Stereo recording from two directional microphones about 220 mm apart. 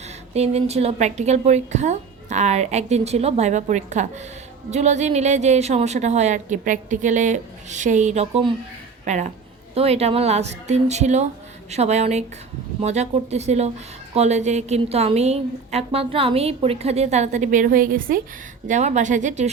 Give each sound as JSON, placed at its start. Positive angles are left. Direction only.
{"t": 0.3, "sound": "a woman's voice", "side_deg": -30}